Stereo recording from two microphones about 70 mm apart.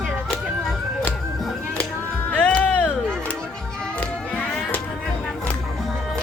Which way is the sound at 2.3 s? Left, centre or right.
Centre.